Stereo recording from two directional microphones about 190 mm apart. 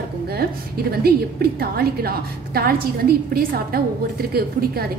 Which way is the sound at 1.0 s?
55° right (ahead or behind).